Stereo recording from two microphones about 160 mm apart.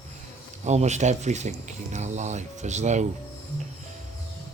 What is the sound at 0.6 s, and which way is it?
Speech, 45° right (ahead or behind).